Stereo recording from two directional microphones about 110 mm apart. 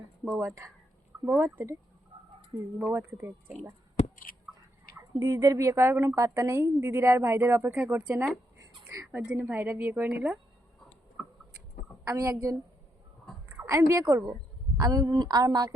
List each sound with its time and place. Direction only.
0.3 s a woman's voice: 30° right (ahead or behind)
2.9 s a woman's voice: 20° right (ahead or behind)
4.0 s a sound: 75° left (ahead or behind)
5.2 s a woman's voice: 30° right (ahead or behind); by 10.3 s 15° right (ahead or behind)
12.0 s a woman's voice: 25° right (ahead or behind)
13.6 s a woman's voice: 25° right (ahead or behind)